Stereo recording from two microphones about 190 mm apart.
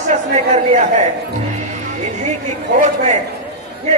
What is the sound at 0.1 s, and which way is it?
Speech, 35° right (ahead or behind).